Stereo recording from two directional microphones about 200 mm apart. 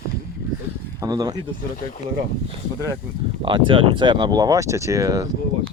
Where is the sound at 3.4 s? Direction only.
25° right (ahead or behind).